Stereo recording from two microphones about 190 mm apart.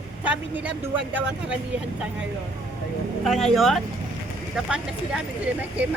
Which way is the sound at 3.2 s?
Centre (ahead or behind).